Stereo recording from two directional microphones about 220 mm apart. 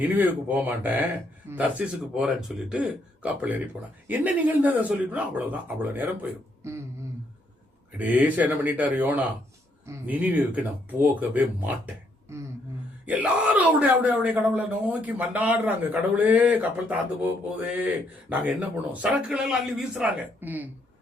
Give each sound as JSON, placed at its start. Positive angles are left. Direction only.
{"t": 0.0, "sound": "speech", "side_deg": -5}
{"t": 7.9, "sound": "speech", "side_deg": -5}
{"t": 12.3, "sound": "a sound", "side_deg": -15}
{"t": 13.1, "sound": "speech", "side_deg": -5}